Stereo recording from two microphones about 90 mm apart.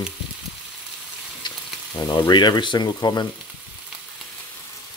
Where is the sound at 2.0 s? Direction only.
50° left (ahead or behind).